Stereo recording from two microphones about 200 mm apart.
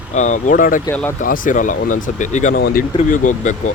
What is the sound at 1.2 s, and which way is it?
Speech, 45° left (ahead or behind).